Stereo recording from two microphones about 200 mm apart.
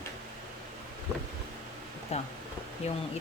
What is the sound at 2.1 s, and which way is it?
Speech, 30° left (ahead or behind).